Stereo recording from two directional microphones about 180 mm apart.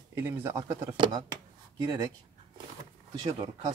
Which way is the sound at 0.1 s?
10° right (ahead or behind).